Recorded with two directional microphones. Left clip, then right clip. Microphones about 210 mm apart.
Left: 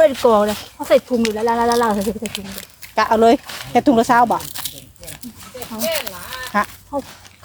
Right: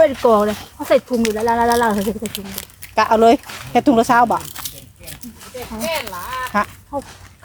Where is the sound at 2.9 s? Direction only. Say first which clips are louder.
Right 1 dB; 5° left (ahead or behind).